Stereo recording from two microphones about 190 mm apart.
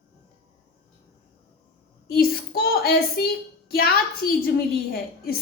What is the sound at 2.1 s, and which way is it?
A woman's voice, 50° left (ahead or behind).